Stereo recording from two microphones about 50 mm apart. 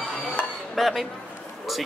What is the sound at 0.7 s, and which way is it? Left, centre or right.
Speech, centre.